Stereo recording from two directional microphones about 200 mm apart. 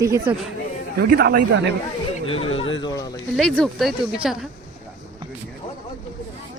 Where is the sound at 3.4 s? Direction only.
5° left (ahead or behind).